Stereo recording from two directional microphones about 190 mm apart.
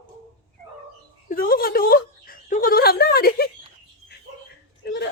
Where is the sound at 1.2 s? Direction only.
50° left (ahead or behind).